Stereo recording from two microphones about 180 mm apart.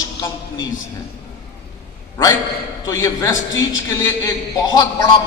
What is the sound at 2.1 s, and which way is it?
A man's voice, 15° left (ahead or behind).